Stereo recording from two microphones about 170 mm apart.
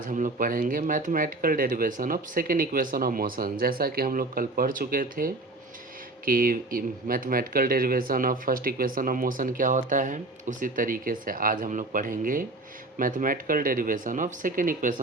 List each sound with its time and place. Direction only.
0.1 s speech: 50° right (ahead or behind)